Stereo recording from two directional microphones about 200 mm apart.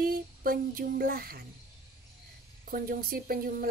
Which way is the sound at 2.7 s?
45° right (ahead or behind).